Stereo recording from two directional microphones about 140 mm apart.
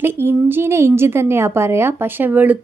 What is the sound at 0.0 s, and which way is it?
A woman's voice, 15° right (ahead or behind).